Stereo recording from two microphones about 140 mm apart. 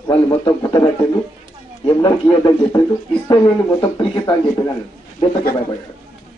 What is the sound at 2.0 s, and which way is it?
Speech, 30° left (ahead or behind).